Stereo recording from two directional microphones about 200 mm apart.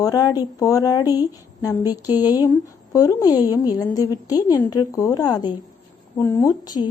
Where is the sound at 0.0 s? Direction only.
20° left (ahead or behind).